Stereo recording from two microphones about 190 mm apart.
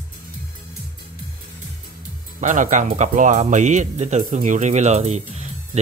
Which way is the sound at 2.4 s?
40° right (ahead or behind).